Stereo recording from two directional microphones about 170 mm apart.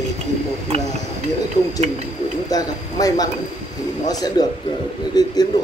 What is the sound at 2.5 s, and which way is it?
Speech, 20° left (ahead or behind).